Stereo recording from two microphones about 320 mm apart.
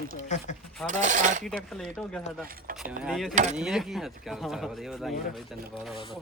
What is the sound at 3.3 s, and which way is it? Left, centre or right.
Speech, right.